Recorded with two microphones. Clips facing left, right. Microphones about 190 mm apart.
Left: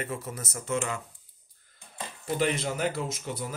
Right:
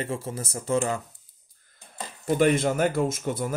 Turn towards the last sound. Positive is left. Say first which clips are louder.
# right 7 dB
turn(degrees=-50)  # may be behind; listen again after turning